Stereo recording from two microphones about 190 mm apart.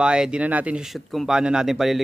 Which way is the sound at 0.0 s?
5° right (ahead or behind).